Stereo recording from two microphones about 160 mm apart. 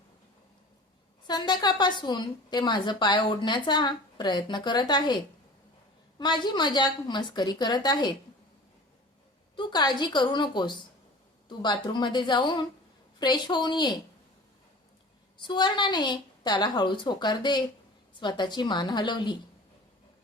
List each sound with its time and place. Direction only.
1.3 s a woman's voice: 25° left (ahead or behind)
9.6 s a woman's voice: 25° left (ahead or behind)
15.4 s a woman's voice: 30° left (ahead or behind)